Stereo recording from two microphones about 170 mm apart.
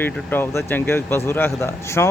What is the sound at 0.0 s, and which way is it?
Speech, 10° left (ahead or behind).